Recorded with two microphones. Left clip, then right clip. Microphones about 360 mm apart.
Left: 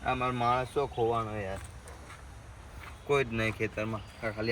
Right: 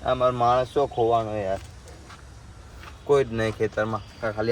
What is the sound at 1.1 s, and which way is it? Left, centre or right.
Speech, centre.